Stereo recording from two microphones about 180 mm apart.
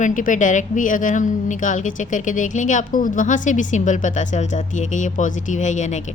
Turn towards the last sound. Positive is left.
turn(degrees=40)  # may be behind; listen again after turning